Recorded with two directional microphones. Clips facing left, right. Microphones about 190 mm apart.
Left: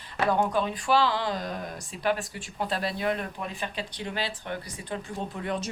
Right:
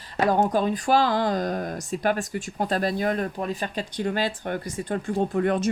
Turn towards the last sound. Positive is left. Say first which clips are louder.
# right 9 dB
turn(degrees=-55)  # may be behind; listen again after turning